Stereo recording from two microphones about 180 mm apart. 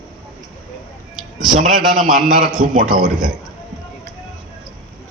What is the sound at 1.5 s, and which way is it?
A man's voice, 45° right (ahead or behind).